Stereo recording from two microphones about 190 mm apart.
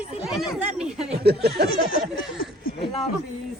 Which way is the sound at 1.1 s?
55° right (ahead or behind).